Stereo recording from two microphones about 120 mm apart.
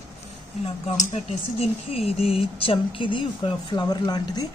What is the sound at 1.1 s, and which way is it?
A woman's voice, 60° left (ahead or behind).